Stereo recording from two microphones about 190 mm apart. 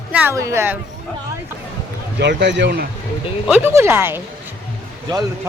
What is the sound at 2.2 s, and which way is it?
Speech, 65° right (ahead or behind).